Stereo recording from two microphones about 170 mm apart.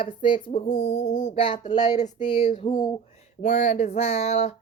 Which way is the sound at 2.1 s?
30° left (ahead or behind).